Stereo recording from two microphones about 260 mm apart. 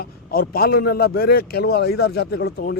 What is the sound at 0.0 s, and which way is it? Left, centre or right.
A man's voice, left.